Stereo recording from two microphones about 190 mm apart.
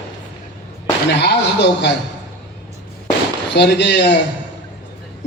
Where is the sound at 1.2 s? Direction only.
65° left (ahead or behind).